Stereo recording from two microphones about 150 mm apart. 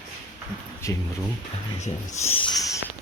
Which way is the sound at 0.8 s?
20° left (ahead or behind).